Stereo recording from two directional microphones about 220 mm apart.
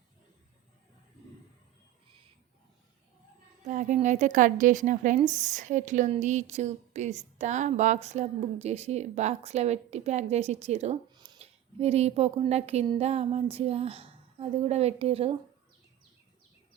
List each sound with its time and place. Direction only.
3.7 s a woman's voice: 35° right (ahead or behind)